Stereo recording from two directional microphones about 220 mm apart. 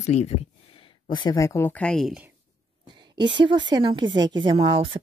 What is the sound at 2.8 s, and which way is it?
A woman's voice, 20° right (ahead or behind).